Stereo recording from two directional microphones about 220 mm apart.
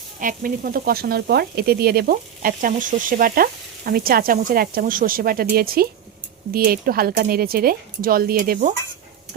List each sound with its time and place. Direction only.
0.2 s speech: 40° right (ahead or behind)